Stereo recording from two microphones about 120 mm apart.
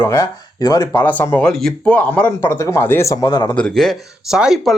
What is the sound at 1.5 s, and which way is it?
Speech, 5° left (ahead or behind).